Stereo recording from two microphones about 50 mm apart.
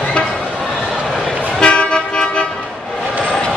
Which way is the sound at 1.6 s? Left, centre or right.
Centre.